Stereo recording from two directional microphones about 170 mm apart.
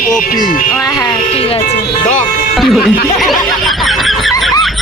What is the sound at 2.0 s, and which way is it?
Music, 45° left (ahead or behind).